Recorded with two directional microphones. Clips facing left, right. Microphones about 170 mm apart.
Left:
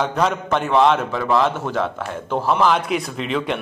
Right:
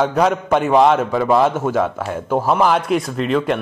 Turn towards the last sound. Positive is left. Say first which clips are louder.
# right 5 dB
turn(degrees=0)  # may be behind; listen again after turning